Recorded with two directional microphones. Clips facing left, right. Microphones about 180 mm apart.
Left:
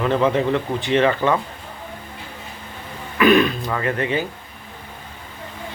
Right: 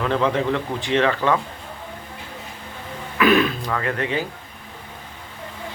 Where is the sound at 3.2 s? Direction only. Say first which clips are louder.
Left 2 dB; centre (ahead or behind).